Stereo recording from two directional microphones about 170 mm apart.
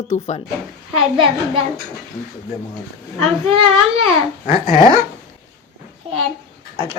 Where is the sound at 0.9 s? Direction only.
30° right (ahead or behind).